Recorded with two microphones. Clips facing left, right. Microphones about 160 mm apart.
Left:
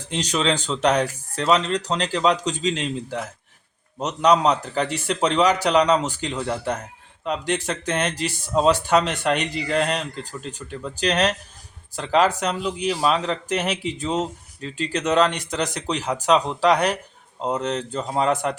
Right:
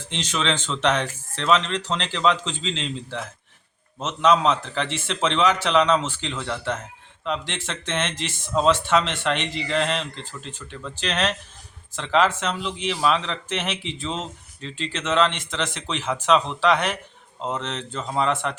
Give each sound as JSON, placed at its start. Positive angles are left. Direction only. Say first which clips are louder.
{"t": 0.1, "sound": "speech", "louder": "left 3 dB", "side_deg": 40}
{"t": 4.0, "sound": "speech", "louder": "left 1 dB", "side_deg": 40}